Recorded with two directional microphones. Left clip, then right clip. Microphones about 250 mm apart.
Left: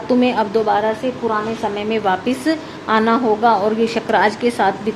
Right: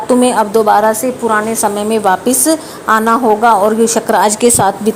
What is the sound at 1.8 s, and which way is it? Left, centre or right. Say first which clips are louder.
A woman's voice: right 5 dB; right.